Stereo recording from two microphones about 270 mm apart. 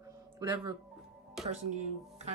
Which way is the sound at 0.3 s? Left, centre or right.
Centre.